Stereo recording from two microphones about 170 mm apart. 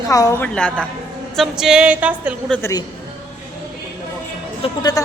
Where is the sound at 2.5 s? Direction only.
15° left (ahead or behind).